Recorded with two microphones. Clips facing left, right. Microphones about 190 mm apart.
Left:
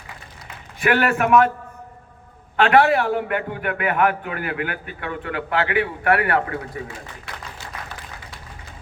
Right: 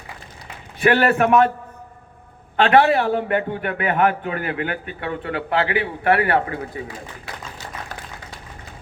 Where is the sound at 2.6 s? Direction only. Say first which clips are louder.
Right 1 dB; 25° right (ahead or behind).